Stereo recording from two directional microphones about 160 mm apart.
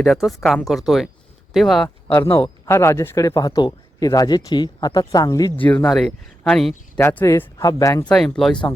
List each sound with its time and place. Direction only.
0.0 s speech: centre (ahead or behind)
2.3 s speech: 15° left (ahead or behind)
5.5 s speech: 10° left (ahead or behind)
8.0 s speech: 5° left (ahead or behind)